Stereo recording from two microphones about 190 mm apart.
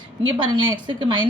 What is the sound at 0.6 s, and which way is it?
Speech, 25° right (ahead or behind).